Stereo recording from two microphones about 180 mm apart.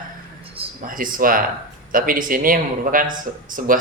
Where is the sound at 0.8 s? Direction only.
50° right (ahead or behind).